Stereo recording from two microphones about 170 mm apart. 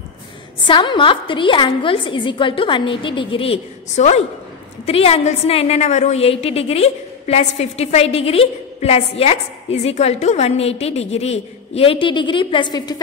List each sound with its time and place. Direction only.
0.7 s a woman's voice: 30° left (ahead or behind)